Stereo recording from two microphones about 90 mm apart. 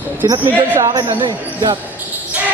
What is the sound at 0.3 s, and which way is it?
Speech, 40° right (ahead or behind).